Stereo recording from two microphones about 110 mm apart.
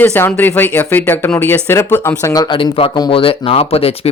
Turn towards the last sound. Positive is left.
turn(degrees=60)  # may be behind; listen again after turning